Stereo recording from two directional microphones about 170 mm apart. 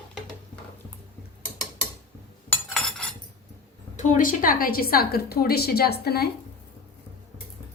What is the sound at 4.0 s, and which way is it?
A woman's voice, 50° left (ahead or behind).